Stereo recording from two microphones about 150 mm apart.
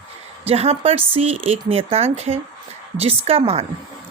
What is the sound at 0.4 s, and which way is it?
A woman's voice, 45° right (ahead or behind).